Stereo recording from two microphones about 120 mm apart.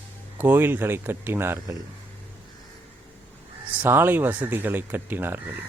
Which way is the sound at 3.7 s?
15° right (ahead or behind).